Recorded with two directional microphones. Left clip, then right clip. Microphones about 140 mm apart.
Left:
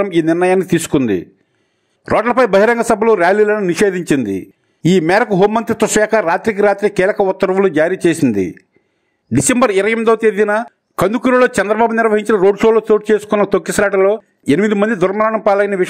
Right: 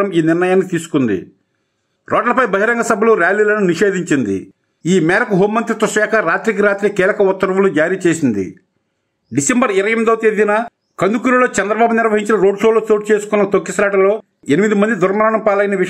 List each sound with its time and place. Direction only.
0.0 s a man's voice: 40° left (ahead or behind)